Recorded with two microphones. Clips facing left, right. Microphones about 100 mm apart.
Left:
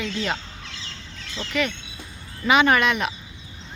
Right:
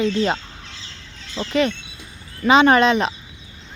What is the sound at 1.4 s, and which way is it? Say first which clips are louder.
Speech: right 6 dB; 35° right (ahead or behind).